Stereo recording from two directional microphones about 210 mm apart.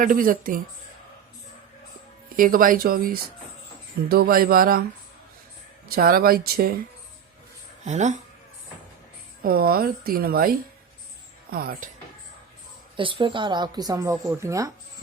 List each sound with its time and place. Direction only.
0.0 s speech: 40° right (ahead or behind)
2.3 s speech: 40° right (ahead or behind)
5.9 s speech: 45° right (ahead or behind)
7.9 s speech: 35° right (ahead or behind)
9.4 s speech: 45° right (ahead or behind)
13.0 s speech: 25° right (ahead or behind)